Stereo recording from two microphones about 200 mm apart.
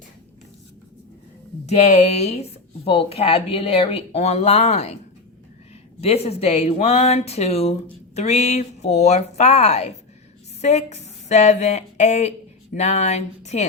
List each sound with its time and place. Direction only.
1.6 s speech: 35° left (ahead or behind)
6.0 s speech: 30° left (ahead or behind)